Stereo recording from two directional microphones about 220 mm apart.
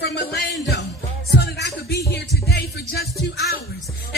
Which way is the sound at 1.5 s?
50° left (ahead or behind).